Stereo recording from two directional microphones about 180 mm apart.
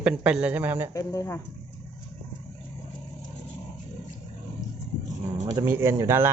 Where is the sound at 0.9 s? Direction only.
15° left (ahead or behind).